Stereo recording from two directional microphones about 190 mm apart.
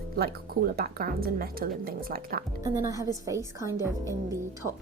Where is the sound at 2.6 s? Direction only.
15° right (ahead or behind).